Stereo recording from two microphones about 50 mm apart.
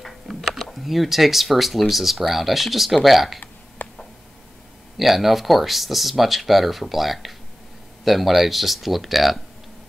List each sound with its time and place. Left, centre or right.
0.4 s speech: centre
3.3 s a sound: left
4.9 s speech: centre